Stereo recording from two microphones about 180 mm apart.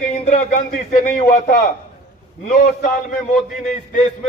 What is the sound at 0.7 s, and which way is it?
A man's voice, 55° left (ahead or behind).